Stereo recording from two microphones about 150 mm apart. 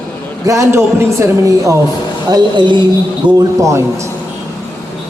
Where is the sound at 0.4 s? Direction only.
20° right (ahead or behind).